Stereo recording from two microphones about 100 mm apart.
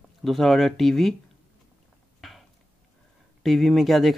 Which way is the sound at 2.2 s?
Centre (ahead or behind).